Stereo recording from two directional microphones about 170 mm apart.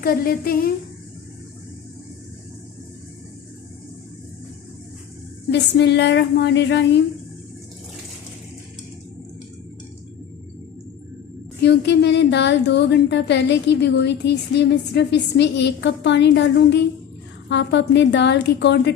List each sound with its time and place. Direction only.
0.0 s a woman's voice: 60° left (ahead or behind)
5.5 s speech: 80° left
11.6 s speech: 80° left